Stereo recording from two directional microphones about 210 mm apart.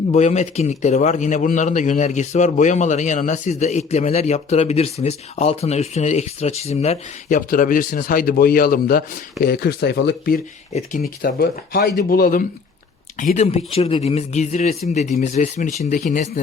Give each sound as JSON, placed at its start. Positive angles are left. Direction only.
{"t": 0.1, "sound": "a man's voice", "side_deg": 35}
{"t": 11.2, "sound": "a man's voice", "side_deg": 45}